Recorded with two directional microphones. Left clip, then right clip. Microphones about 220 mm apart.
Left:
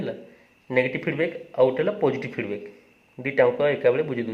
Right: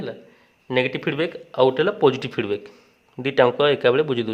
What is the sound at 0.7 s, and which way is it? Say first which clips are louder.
Speech: right 1 dB; 35° right (ahead or behind).